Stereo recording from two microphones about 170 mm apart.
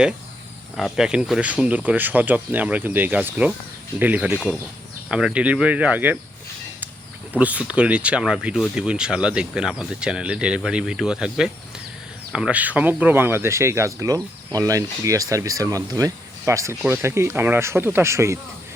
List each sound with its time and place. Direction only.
0.8 s speech: centre (ahead or behind)
7.3 s speech: 10° right (ahead or behind)